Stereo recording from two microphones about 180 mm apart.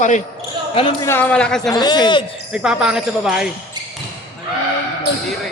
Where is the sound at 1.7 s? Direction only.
25° left (ahead or behind).